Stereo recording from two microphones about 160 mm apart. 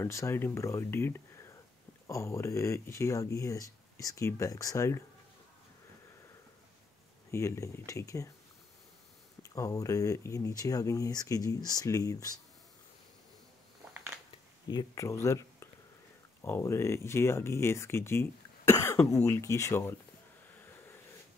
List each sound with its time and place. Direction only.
0.0 s speech: 15° left (ahead or behind)
7.2 s speech: 15° left (ahead or behind)
9.4 s speech: 20° left (ahead or behind)
14.7 s speech: 25° left (ahead or behind)